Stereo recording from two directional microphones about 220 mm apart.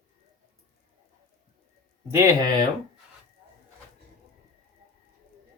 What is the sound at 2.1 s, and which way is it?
Speech, 15° right (ahead or behind).